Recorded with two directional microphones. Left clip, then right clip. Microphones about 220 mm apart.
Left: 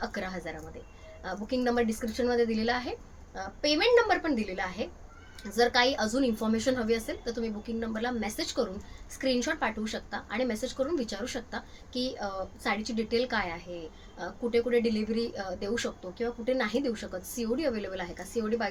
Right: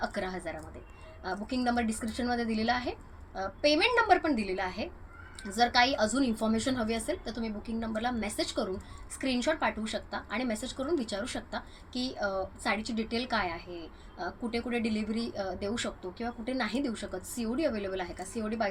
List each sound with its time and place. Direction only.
0.0 s a woman's voice: 15° left (ahead or behind)